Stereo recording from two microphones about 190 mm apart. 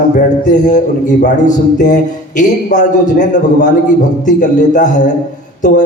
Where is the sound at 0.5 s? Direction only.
40° left (ahead or behind).